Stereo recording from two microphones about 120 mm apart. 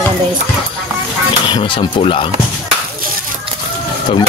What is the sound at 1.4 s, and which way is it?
Speech, 40° left (ahead or behind).